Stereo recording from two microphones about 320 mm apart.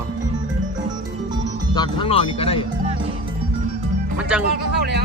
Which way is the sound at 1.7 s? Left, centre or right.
Centre.